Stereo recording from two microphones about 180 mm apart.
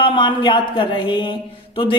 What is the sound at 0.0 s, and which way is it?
Speech, 25° left (ahead or behind).